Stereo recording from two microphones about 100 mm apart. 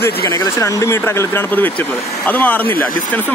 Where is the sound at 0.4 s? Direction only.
30° left (ahead or behind); by 2.6 s 15° left (ahead or behind).